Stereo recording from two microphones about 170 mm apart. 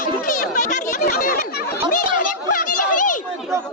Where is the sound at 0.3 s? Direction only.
50° left (ahead or behind).